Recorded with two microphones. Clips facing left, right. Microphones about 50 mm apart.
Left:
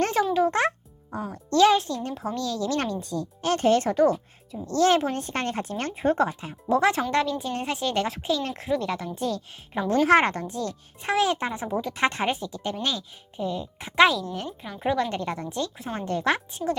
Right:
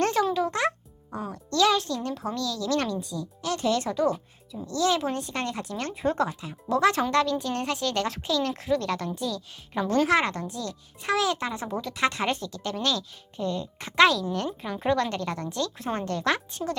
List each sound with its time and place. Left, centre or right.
0.0 s music: left
0.3 s a child's voice: left
8.7 s speech: centre
9.1 s speech: left
9.7 s speech: centre
10.1 s speech: left
12.3 s speech: centre
13.4 s a woman's voice: centre
15.1 s speech: centre
15.8 s speech: centre
16.0 s speech: left